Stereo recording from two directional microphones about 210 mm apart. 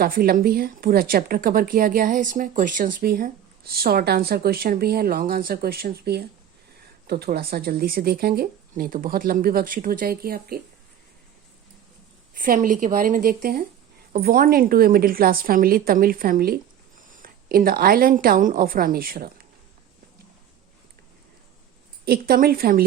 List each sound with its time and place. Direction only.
0.0 s speech: 45° right (ahead or behind)
12.4 s a woman's voice: 40° right (ahead or behind)
22.0 s speech: 45° right (ahead or behind)